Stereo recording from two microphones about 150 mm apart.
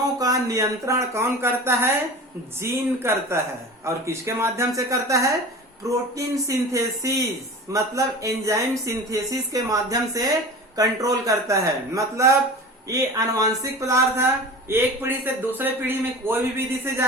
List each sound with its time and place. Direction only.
0.2 s a man's voice: 25° right (ahead or behind)